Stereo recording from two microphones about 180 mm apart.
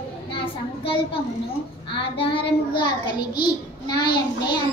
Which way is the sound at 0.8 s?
30° left (ahead or behind).